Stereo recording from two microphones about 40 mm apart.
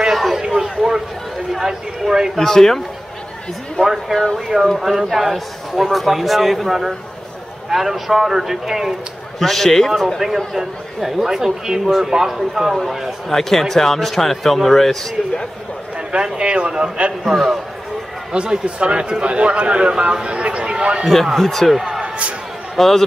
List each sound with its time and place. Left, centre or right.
0.0 s a sound: centre
1.6 s speech: centre
2.3 s speech: centre
3.8 s a man's voice: centre
9.4 s a man's voice: centre
13.3 s speech: centre
16.1 s a man's voice: right
17.2 s a man's voice: centre
18.3 s a man's voice: right
21.3 s a man's voice: centre
22.8 s a man's voice: centre